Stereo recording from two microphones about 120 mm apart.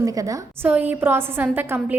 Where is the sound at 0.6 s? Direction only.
15° right (ahead or behind).